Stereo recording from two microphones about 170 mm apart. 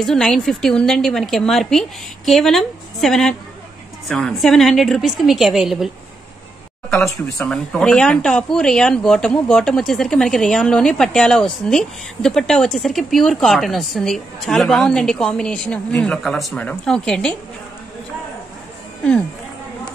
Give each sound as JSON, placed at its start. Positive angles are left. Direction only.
{"t": 0.0, "sound": "speech", "side_deg": 5}
{"t": 7.0, "sound": "speech", "side_deg": 15}
{"t": 7.5, "sound": "speech", "side_deg": 5}